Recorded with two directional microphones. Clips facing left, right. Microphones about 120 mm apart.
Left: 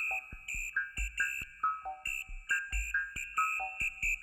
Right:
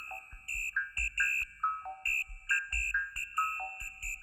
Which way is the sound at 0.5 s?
90° left.